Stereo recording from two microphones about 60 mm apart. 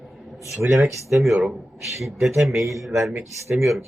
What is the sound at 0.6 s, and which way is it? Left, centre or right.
Speech, right.